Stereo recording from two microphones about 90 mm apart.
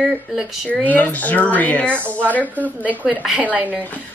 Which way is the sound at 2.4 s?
20° right (ahead or behind).